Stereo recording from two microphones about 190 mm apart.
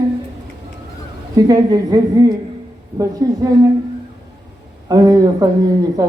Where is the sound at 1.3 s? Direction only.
20° right (ahead or behind).